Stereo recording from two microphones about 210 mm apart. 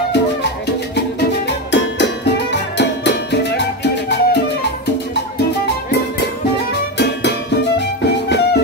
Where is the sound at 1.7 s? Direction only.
55° left (ahead or behind).